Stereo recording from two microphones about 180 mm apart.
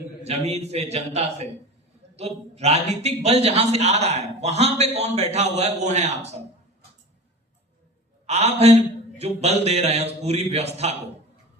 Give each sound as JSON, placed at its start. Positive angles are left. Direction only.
{"t": 0.3, "sound": "a man's voice", "side_deg": -35}
{"t": 8.3, "sound": "a man's voice", "side_deg": -35}